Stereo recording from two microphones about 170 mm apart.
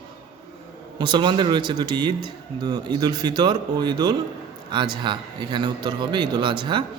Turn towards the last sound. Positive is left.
turn(degrees=-30)  # may be behind; listen again after turning